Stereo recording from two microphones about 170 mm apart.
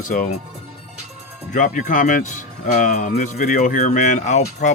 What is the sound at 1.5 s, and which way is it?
Speech, 50° left (ahead or behind).